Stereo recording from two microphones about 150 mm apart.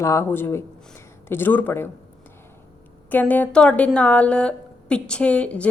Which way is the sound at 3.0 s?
10° left (ahead or behind).